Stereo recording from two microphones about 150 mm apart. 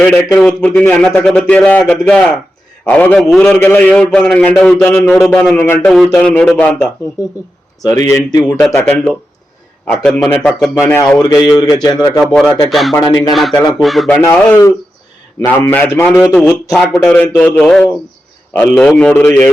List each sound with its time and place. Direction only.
0.3 s a man's voice: 10° left (ahead or behind)
5.9 s speech: 5° left (ahead or behind)
7.8 s a man's voice: 20° left (ahead or behind)
8.8 s a man's voice: 5° left (ahead or behind)
10.8 s a man's voice: 20° left (ahead or behind)
12.2 s speech: centre (ahead or behind)
13.0 s a man's voice: 25° left (ahead or behind)
13.3 s speech: centre (ahead or behind)
14.2 s a man's voice: 20° left (ahead or behind)
16.0 s a sound: centre (ahead or behind)
16.9 s a man's voice: 10° left (ahead or behind)